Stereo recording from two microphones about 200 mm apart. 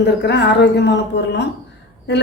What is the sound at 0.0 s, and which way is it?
A woman's voice, 60° left (ahead or behind).